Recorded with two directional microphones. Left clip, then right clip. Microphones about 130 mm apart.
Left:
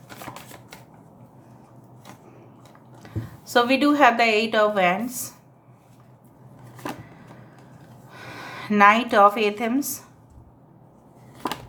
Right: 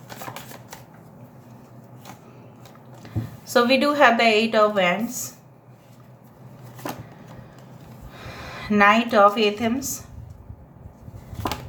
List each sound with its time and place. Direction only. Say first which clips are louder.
3.0 s a woman's voice: right 2 dB; 20° left (ahead or behind)
8.1 s a woman's voice: even; 30° left (ahead or behind)